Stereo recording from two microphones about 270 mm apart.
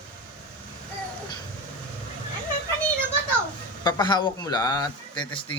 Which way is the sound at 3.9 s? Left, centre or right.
Centre.